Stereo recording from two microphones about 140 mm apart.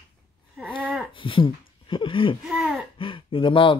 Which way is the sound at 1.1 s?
35° left (ahead or behind).